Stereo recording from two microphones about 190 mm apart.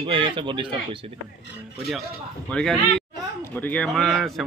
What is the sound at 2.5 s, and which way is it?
Speech, 5° left (ahead or behind).